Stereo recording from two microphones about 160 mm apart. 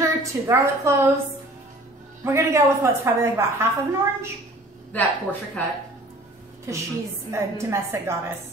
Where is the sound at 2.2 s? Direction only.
15° right (ahead or behind).